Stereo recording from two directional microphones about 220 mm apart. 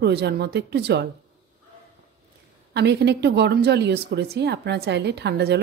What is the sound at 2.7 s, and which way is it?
Speech, 50° right (ahead or behind).